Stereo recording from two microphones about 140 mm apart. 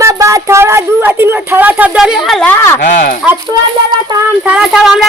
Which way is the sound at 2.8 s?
65° left (ahead or behind).